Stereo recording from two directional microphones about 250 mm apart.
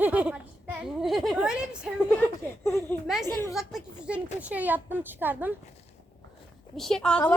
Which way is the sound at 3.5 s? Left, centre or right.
Centre.